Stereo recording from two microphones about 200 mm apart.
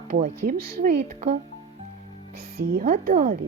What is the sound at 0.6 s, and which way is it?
Speech, 50° right (ahead or behind).